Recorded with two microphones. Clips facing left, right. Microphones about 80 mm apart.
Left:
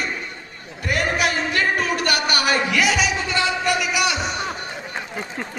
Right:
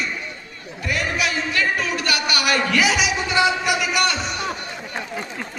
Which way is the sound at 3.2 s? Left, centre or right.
Centre.